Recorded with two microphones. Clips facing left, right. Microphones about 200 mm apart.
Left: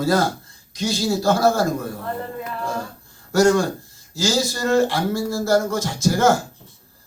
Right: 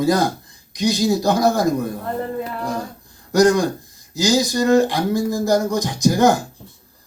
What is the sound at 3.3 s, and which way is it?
Speech, 15° right (ahead or behind).